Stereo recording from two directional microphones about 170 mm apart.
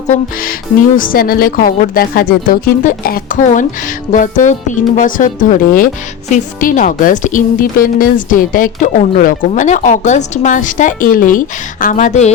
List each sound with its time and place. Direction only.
0.9 s a woman's voice: 55° left (ahead or behind)